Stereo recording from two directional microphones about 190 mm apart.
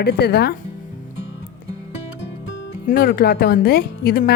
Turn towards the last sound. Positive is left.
turn(degrees=55)  # may be behind; listen again after turning